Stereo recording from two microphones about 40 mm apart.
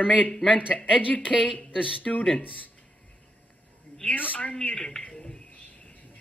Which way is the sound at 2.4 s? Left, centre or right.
Left.